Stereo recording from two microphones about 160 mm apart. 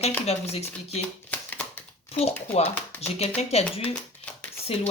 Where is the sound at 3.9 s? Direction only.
5° left (ahead or behind).